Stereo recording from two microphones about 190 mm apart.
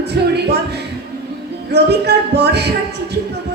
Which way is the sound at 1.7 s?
60° right (ahead or behind).